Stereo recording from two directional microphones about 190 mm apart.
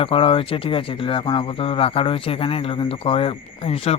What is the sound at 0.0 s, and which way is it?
Speech, 30° left (ahead or behind).